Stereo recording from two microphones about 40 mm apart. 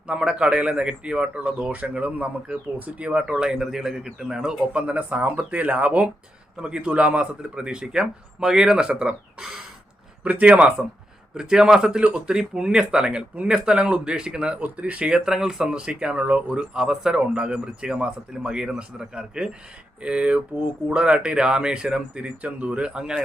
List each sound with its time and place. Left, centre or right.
0.1 s speech: right
3.0 s speech: right
3.4 s a man's voice: centre
4.9 s speech: right
6.6 s speech: right
10.4 s speech: right
11.3 s speech: centre
14.8 s speech: right
15.0 s a man's voice: centre
15.7 s speech: right
16.7 s a man's voice: centre
17.2 s speech: right
22.9 s speech: centre